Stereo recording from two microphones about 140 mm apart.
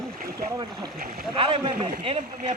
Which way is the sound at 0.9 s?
90° right.